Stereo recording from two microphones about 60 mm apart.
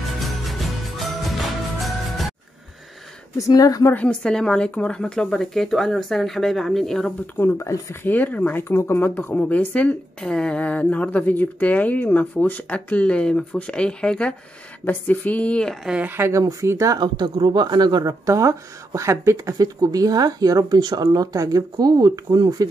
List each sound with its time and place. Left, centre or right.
0.2 s music: centre
3.3 s speech: left
3.9 s speech: centre
7.5 s speech: left
7.9 s speech: left
8.6 s speech: left
10.2 s speech: centre
14.9 s speech: left
15.9 s speech: centre
16.2 s speech: right
18.0 s speech: right
19.6 s speech: right